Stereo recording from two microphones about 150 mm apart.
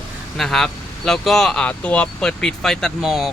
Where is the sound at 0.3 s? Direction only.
5° left (ahead or behind).